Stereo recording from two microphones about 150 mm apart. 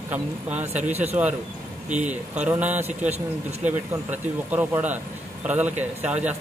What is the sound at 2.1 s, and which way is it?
Speech, 10° right (ahead or behind).